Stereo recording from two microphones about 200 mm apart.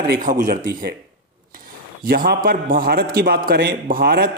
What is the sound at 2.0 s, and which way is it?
A man's voice, 45° right (ahead or behind).